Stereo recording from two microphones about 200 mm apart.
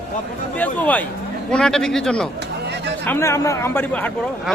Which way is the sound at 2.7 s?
60° right (ahead or behind).